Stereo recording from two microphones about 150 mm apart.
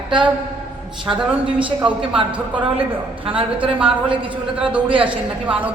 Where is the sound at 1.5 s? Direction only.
35° right (ahead or behind).